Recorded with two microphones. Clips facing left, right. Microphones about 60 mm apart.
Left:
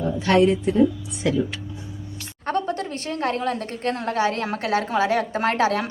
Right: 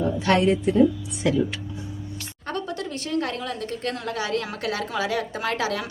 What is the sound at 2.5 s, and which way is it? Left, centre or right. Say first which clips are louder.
A woman's voice: left 5 dB; left.